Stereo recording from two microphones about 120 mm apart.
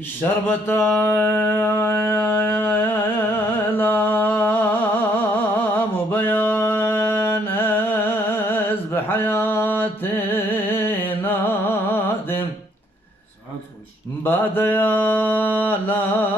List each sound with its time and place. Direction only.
0.2 s mantra: 15° left (ahead or behind)
0.8 s a sound: 20° left (ahead or behind)
14.2 s mantra: 15° left (ahead or behind)